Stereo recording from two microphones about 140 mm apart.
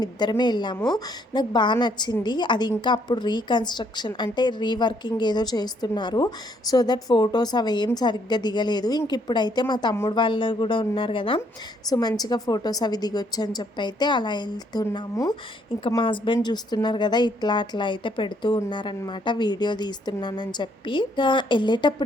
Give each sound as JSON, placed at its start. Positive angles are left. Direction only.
{"t": 0.0, "sound": "a woman's voice", "side_deg": 30}
{"t": 11.9, "sound": "a woman's voice", "side_deg": 25}